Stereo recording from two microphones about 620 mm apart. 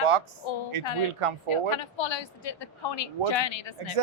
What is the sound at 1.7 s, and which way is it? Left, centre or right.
A woman's voice, left.